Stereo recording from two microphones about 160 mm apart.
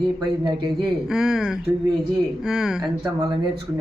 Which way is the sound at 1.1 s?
5° right (ahead or behind).